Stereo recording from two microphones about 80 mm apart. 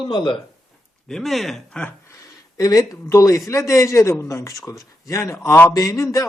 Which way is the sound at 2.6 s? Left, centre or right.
Left.